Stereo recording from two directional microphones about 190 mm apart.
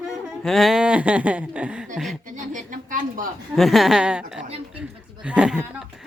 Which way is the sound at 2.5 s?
45° right (ahead or behind).